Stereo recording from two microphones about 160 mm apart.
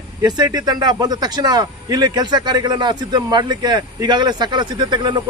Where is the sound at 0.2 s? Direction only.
25° right (ahead or behind).